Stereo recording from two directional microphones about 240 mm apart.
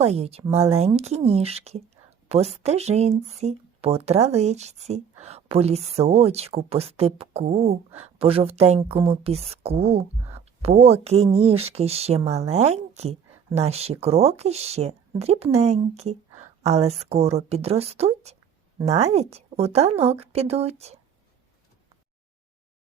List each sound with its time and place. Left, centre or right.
0.0 s speech: right